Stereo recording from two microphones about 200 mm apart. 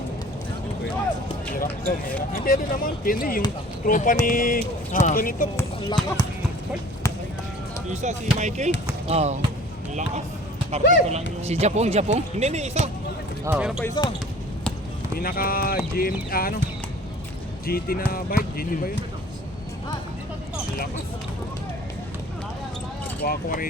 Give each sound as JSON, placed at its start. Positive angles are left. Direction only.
{"t": 2.3, "sound": "speech", "side_deg": 45}
{"t": 5.5, "sound": "speech", "side_deg": 20}
{"t": 8.0, "sound": "speech", "side_deg": -35}
{"t": 10.7, "sound": "speech", "side_deg": -30}
{"t": 13.4, "sound": "speech", "side_deg": -5}
{"t": 13.8, "sound": "speech", "side_deg": 20}
{"t": 15.1, "sound": "speech", "side_deg": 45}
{"t": 17.7, "sound": "speech", "side_deg": 50}
{"t": 23.2, "sound": "speech", "side_deg": 45}